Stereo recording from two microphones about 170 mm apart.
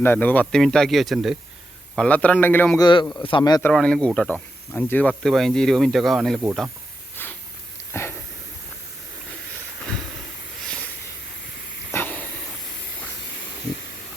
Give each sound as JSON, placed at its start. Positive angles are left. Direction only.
{"t": 0.0, "sound": "speech", "side_deg": 10}
{"t": 2.0, "sound": "a man's voice", "side_deg": 10}
{"t": 2.8, "sound": "speech", "side_deg": 25}
{"t": 3.6, "sound": "speech", "side_deg": 5}
{"t": 7.2, "sound": "a sound", "side_deg": 10}
{"t": 11.9, "sound": "dog", "side_deg": 10}